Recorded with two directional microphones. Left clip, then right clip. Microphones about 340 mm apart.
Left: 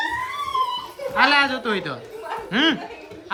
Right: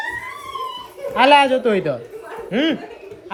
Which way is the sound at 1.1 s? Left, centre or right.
Centre.